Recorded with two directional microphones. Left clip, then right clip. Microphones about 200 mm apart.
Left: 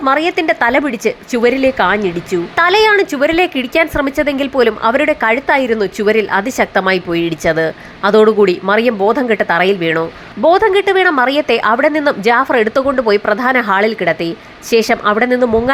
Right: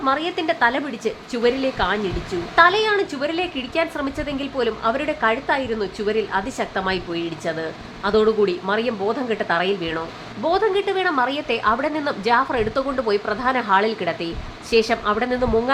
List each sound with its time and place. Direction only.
0.0 s speech: 30° left (ahead or behind)